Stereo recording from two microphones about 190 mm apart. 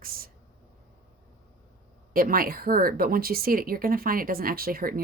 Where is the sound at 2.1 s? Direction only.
50° right (ahead or behind).